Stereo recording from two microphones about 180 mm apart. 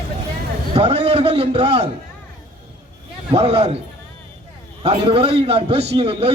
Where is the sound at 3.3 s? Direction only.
30° right (ahead or behind).